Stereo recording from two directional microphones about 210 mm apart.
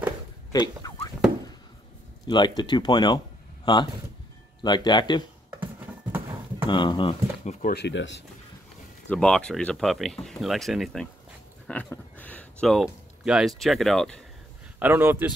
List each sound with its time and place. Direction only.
0.5 s a sound: 15° left (ahead or behind)
2.2 s speech: 20° left (ahead or behind)
6.7 s speech: 20° left (ahead or behind)
7.6 s speech: 50° left (ahead or behind)
9.1 s speech: 5° left (ahead or behind)
14.8 s a man's voice: 10° right (ahead or behind)